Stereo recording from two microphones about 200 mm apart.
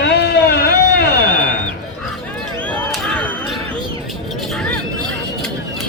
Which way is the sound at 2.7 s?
5° left (ahead or behind).